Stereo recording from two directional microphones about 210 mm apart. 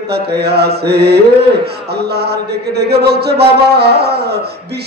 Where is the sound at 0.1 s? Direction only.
50° right (ahead or behind).